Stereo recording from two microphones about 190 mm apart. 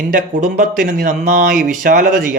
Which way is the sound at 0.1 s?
45° right (ahead or behind).